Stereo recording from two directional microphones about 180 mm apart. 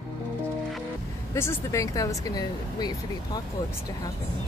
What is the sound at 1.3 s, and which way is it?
Speech, 15° left (ahead or behind).